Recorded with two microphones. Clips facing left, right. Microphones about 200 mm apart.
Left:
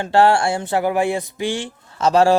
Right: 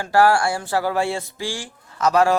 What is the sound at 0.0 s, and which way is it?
A man's voice, 25° left (ahead or behind).